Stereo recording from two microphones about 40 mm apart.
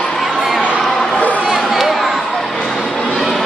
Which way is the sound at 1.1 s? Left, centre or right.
Left.